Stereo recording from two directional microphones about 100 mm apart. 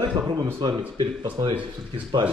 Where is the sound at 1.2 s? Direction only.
50° right (ahead or behind).